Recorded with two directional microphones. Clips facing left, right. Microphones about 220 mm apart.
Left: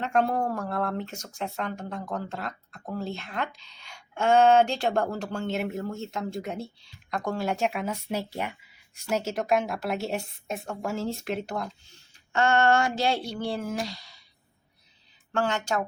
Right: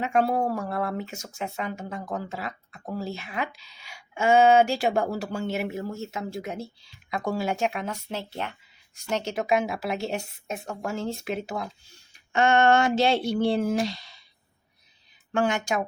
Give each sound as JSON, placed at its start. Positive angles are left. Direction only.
{"t": 0.0, "sound": "speech", "side_deg": -5}
{"t": 8.3, "sound": "speech", "side_deg": 15}
{"t": 9.0, "sound": "speech", "side_deg": 0}
{"t": 12.3, "sound": "speech", "side_deg": -15}
{"t": 15.3, "sound": "speech", "side_deg": -15}